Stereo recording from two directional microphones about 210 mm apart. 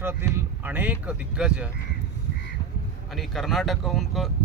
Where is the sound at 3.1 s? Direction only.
Centre (ahead or behind).